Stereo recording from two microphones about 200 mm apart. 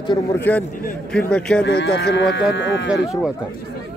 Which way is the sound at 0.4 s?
10° left (ahead or behind).